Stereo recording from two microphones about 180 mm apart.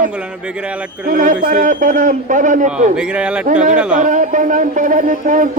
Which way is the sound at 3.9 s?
45° right (ahead or behind).